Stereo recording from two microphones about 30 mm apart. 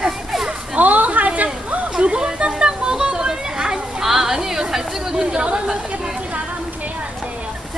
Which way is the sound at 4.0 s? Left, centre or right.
Centre.